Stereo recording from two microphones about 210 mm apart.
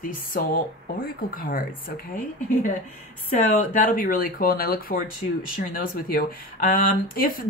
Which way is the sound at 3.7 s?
40° left (ahead or behind).